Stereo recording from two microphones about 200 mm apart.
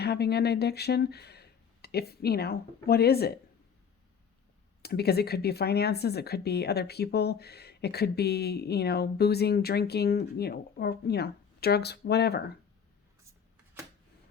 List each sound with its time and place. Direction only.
0.0 s speech: 55° left (ahead or behind)
4.8 s speech: 55° left (ahead or behind)